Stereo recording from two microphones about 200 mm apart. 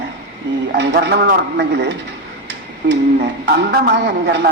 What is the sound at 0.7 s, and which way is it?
Speech, 60° right (ahead or behind).